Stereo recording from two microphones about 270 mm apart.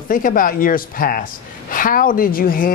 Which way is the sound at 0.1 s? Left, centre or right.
Left.